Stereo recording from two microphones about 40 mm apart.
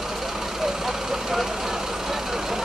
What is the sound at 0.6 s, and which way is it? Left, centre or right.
Vehicle, centre.